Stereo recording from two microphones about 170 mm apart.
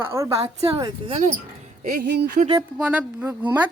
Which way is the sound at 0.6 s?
30° right (ahead or behind).